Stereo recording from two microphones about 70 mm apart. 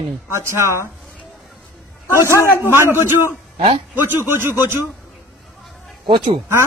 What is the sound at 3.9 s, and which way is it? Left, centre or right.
Speech, right.